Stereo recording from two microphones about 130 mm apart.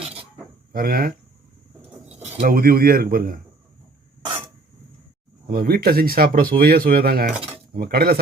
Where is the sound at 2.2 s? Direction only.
75° right (ahead or behind); by 3.4 s 90° right.